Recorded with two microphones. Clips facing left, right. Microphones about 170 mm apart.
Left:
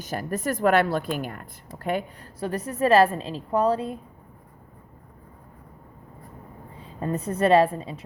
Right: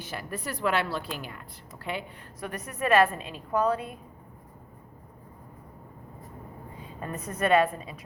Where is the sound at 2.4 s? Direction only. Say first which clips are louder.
Left 7 dB; 30° left (ahead or behind).